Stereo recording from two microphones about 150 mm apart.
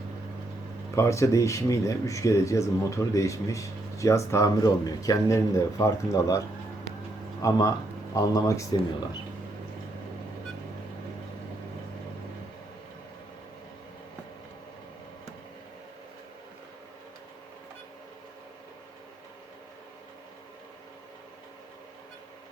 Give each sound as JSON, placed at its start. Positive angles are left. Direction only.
{"t": 0.9, "sound": "speech", "side_deg": 20}
{"t": 7.4, "sound": "speech", "side_deg": 20}